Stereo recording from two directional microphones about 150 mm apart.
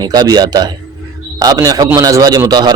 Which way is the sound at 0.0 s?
25° right (ahead or behind).